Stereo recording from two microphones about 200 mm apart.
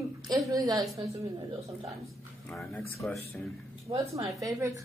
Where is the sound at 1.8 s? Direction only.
Centre (ahead or behind).